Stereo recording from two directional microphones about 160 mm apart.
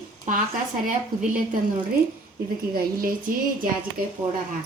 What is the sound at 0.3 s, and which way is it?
Speech, 50° right (ahead or behind).